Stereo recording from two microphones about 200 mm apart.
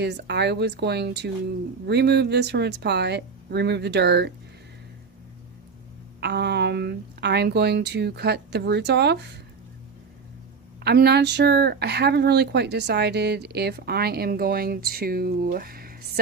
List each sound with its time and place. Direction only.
0.0 s a woman's voice: 55° right (ahead or behind)
6.1 s a woman's voice: 55° right (ahead or behind)
10.8 s speech: 55° right (ahead or behind)